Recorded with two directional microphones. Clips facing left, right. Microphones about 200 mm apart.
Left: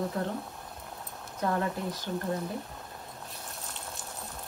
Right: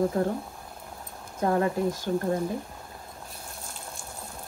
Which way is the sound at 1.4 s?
45° right (ahead or behind).